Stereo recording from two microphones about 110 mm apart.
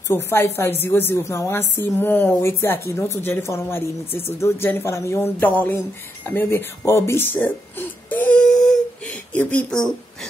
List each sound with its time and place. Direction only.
0.1 s a woman's voice: 20° left (ahead or behind)
7.3 s whimper: 15° left (ahead or behind)
9.3 s speech: 15° left (ahead or behind)